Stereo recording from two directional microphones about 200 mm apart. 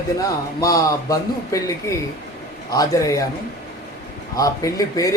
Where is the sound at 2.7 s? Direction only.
15° left (ahead or behind).